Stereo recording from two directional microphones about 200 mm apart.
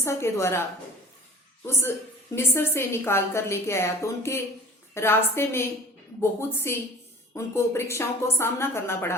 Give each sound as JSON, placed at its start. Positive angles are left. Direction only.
{"t": 0.0, "sound": "a woman's voice", "side_deg": 15}
{"t": 1.6, "sound": "a woman's voice", "side_deg": 10}
{"t": 6.7, "sound": "a woman's voice", "side_deg": 10}